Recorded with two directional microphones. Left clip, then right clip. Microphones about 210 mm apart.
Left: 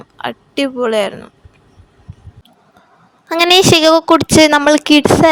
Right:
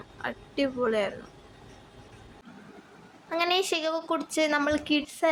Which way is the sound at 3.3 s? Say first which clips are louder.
Left 17 dB; 50° left (ahead or behind).